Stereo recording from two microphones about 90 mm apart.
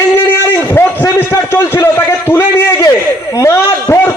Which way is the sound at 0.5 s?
25° left (ahead or behind).